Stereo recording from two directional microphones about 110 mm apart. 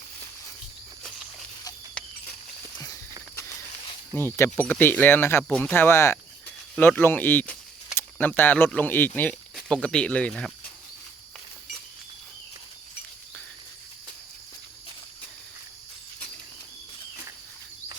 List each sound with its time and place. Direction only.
2.0 s horse: 10° left (ahead or behind)
2.7 s walk: 35° left (ahead or behind)
4.1 s speech: 20° left (ahead or behind)
5.5 s speech: 10° left (ahead or behind)
5.7 s speech: 20° left (ahead or behind)
9.6 s speech: 5° left (ahead or behind)